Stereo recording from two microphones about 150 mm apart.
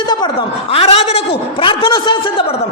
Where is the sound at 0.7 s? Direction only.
40° left (ahead or behind).